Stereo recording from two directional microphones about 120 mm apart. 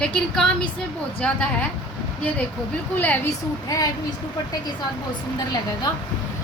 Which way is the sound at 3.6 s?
30° left (ahead or behind).